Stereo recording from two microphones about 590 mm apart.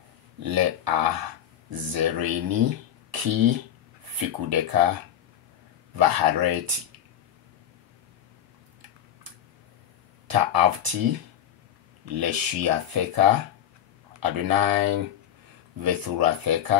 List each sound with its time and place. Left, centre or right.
0.4 s speech: right
5.9 s speech: right
10.2 s speech: right